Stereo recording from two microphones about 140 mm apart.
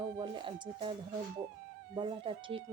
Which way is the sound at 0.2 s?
35° right (ahead or behind).